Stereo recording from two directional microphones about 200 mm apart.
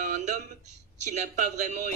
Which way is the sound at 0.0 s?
35° right (ahead or behind).